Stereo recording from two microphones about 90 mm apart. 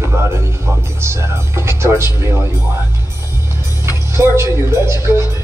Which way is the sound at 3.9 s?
30° right (ahead or behind).